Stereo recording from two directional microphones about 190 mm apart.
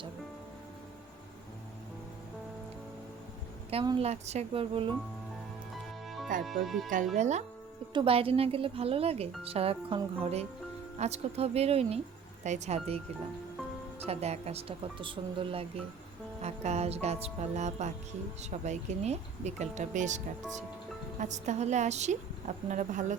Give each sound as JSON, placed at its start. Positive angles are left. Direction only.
{"t": 3.7, "sound": "a woman's voice", "side_deg": -30}
{"t": 5.7, "sound": "music", "side_deg": 0}
{"t": 6.4, "sound": "speech", "side_deg": 0}
{"t": 7.2, "sound": "a woman's voice", "side_deg": -35}
{"t": 14.0, "sound": "a woman's voice", "side_deg": -35}